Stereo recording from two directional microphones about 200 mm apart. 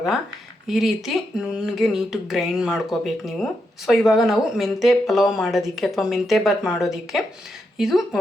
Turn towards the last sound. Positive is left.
turn(degrees=0)  # may be behind; listen again after turning